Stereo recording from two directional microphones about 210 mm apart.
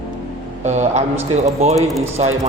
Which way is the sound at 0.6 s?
35° right (ahead or behind).